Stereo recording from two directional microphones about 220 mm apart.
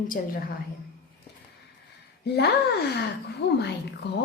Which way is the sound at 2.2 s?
50° left (ahead or behind).